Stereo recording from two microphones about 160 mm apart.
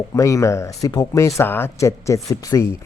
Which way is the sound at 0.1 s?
20° left (ahead or behind).